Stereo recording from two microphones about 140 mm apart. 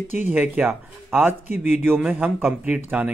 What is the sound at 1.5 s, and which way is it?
Speech, 55° left (ahead or behind).